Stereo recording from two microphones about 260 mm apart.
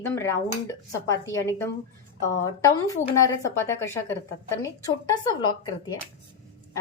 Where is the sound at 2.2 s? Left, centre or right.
Centre.